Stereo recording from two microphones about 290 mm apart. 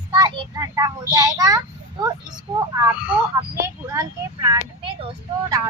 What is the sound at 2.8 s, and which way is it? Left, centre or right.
A child's voice, centre.